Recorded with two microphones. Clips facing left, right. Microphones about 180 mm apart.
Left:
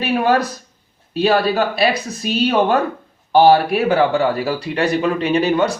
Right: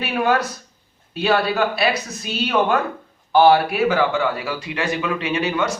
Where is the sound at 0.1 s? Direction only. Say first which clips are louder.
Left 3 dB; 35° left (ahead or behind).